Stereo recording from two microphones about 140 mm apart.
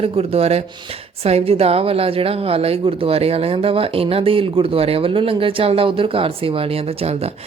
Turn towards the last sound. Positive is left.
turn(degrees=-45)  # may be behind; listen again after turning